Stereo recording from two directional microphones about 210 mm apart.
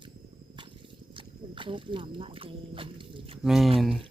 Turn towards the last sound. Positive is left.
turn(degrees=0)  # may be behind; listen again after turning